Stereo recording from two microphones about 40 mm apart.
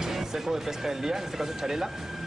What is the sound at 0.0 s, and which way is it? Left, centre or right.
Speech, centre.